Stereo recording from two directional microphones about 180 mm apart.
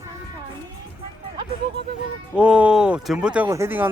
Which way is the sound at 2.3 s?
5° right (ahead or behind).